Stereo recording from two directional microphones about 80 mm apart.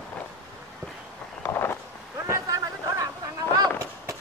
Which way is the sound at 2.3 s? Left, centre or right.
Right.